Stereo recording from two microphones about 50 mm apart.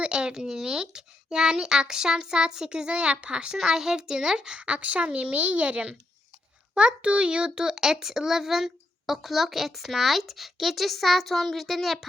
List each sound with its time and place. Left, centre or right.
0.0 s a child's voice: centre